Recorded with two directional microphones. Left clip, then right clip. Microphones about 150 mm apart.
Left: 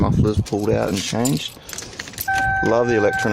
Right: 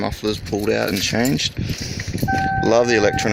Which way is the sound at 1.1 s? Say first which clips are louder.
Right 2 dB; 15° right (ahead or behind).